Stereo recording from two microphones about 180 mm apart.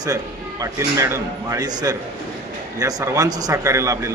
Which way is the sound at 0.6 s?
15° right (ahead or behind).